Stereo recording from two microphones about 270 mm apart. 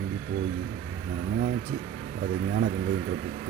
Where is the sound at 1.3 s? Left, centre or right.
Right.